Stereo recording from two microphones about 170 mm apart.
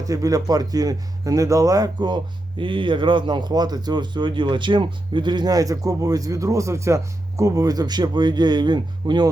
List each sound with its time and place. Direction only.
0.0 s speech: 20° right (ahead or behind)